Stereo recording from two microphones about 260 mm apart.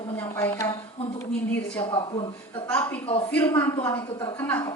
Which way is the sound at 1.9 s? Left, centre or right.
Centre.